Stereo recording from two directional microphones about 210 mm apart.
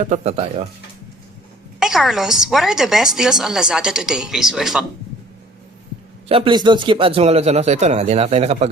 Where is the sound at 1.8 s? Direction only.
Centre (ahead or behind).